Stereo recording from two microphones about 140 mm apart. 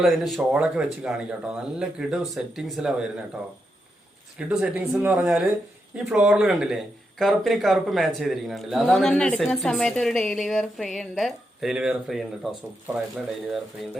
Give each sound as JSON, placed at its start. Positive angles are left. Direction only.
{"t": 0.0, "sound": "speech", "side_deg": 0}
{"t": 4.4, "sound": "speech", "side_deg": -10}